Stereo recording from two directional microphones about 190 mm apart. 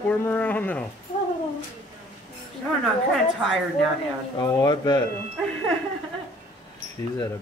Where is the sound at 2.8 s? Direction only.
Centre (ahead or behind).